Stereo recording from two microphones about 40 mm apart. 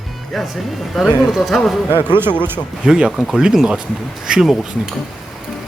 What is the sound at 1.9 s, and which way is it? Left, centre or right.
Speech, right.